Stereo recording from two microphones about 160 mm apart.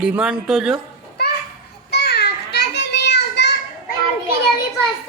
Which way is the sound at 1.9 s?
90° left.